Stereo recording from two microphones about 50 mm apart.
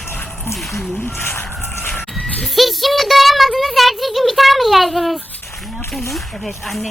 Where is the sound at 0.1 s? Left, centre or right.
Left.